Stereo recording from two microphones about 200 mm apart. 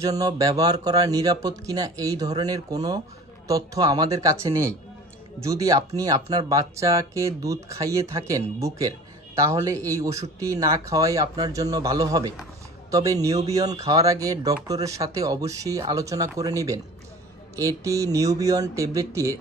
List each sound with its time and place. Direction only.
0.0 s a man's voice: 15° right (ahead or behind)